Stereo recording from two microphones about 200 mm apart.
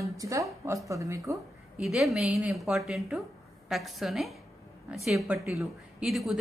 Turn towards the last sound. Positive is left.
turn(degrees=0)  # may be behind; listen again after turning